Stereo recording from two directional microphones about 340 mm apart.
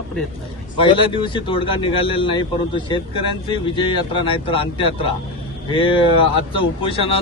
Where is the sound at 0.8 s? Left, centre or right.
Centre.